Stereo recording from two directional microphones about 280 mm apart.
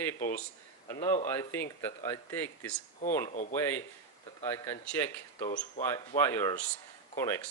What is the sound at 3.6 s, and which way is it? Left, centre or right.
Speech, centre.